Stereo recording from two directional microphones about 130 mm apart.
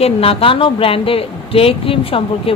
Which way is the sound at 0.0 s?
45° left (ahead or behind).